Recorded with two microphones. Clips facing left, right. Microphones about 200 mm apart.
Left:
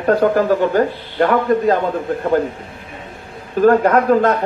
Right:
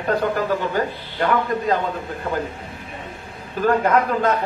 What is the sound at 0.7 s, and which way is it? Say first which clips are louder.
A man's voice: left 7 dB; 45° left (ahead or behind).